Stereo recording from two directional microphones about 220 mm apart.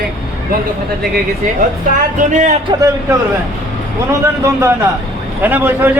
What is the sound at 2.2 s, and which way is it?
Speech, 35° right (ahead or behind).